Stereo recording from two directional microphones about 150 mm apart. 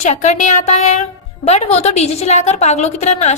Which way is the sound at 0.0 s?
50° left (ahead or behind).